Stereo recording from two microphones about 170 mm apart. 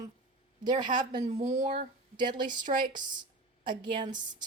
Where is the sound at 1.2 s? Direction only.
40° right (ahead or behind).